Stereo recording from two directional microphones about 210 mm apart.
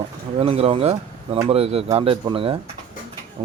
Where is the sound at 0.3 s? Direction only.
30° right (ahead or behind).